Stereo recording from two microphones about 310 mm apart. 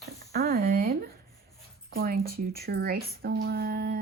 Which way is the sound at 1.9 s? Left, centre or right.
Right.